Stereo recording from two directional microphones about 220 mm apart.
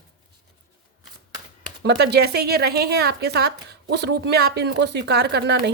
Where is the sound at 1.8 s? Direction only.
50° right (ahead or behind).